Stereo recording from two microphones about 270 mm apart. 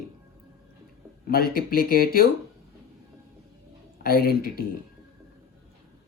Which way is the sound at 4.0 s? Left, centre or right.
Left.